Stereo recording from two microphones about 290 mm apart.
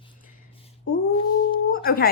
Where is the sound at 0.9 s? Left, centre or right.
Left.